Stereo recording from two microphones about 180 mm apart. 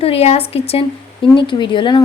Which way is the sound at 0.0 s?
35° left (ahead or behind).